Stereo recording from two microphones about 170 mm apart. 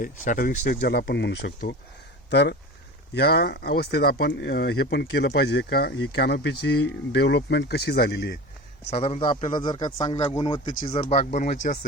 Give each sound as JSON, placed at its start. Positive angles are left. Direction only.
{"t": 0.0, "sound": "speech", "side_deg": 55}
{"t": 8.9, "sound": "speech", "side_deg": 40}